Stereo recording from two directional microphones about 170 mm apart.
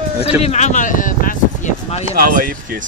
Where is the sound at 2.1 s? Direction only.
60° right (ahead or behind).